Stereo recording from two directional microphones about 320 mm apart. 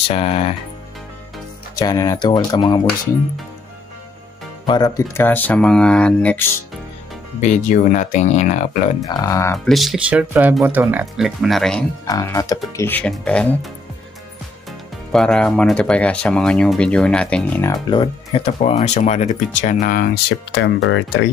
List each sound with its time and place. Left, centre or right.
0.1 s speech: centre
1.8 s speech: centre
4.6 s speech: centre
7.3 s speech: left
9.0 s speech: centre
15.1 s speech: centre; by 20.1 s left
20.5 s speech: left